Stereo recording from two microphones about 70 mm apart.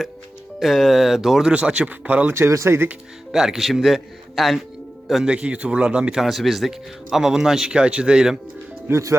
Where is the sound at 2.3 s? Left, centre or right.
Right.